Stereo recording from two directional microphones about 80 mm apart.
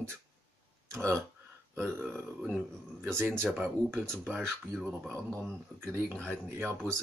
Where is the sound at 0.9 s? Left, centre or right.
Right.